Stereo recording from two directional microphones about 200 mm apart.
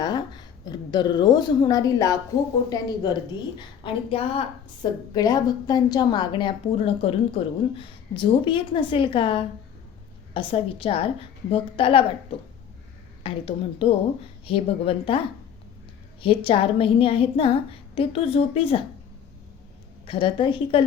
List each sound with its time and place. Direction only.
0.0 s a woman's voice: 20° left (ahead or behind)
16.2 s a woman's voice: 25° left (ahead or behind)
20.1 s a woman's voice: 25° left (ahead or behind)